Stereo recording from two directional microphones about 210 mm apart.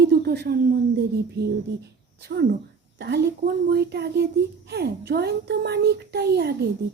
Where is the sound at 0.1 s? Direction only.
50° right (ahead or behind).